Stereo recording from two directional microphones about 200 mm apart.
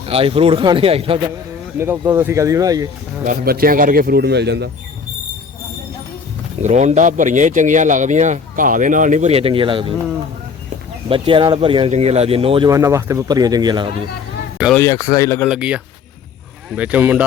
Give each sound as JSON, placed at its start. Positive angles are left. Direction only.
{"t": 0.1, "sound": "speech", "side_deg": -30}
{"t": 1.8, "sound": "speech", "side_deg": -10}
{"t": 3.2, "sound": "speech", "side_deg": -50}
{"t": 6.6, "sound": "speech", "side_deg": -35}
{"t": 11.1, "sound": "speech", "side_deg": -25}
{"t": 14.7, "sound": "speech", "side_deg": 15}
{"t": 15.4, "sound": "speech", "side_deg": -5}